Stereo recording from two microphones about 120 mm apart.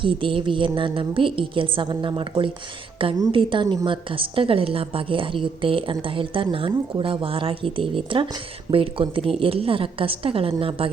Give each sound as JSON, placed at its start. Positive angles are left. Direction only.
{"t": 0.0, "sound": "a woman's voice", "side_deg": -45}